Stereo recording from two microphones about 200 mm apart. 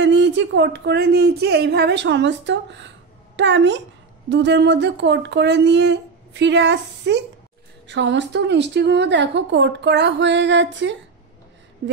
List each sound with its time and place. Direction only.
0.0 s speech: 65° right (ahead or behind)